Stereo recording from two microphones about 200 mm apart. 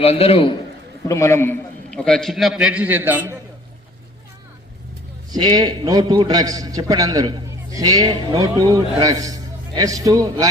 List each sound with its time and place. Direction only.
0.0 s a man's voice: 30° left (ahead or behind)
1.0 s a man's voice: 15° left (ahead or behind); by 3.3 s 10° right (ahead or behind)
5.3 s a man's voice: 20° right (ahead or behind)